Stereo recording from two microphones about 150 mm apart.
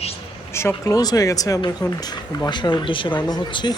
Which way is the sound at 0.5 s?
20° left (ahead or behind).